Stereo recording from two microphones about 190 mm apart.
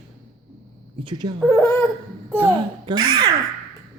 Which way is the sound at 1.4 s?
10° left (ahead or behind).